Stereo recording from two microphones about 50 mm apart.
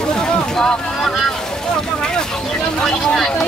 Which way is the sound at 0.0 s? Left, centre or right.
Centre.